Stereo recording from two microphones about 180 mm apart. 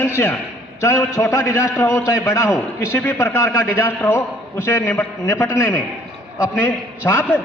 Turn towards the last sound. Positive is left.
turn(degrees=15)  # may be behind; listen again after turning